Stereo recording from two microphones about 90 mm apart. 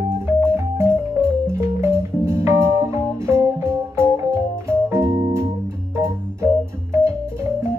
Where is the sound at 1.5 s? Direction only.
30° right (ahead or behind).